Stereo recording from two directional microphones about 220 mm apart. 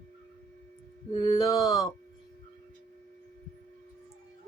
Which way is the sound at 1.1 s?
20° left (ahead or behind).